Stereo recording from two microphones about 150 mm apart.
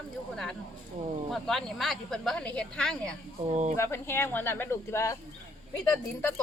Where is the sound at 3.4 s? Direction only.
50° right (ahead or behind).